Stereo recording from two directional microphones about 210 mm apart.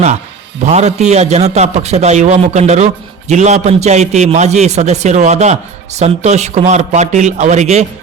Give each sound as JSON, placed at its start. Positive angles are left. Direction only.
{"t": 0.6, "sound": "a man's voice", "side_deg": -30}